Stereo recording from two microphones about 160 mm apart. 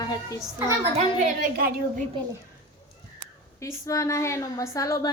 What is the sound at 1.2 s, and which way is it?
Speech, 65° right (ahead or behind).